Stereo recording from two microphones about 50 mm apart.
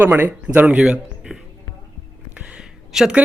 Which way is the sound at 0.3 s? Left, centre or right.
Right.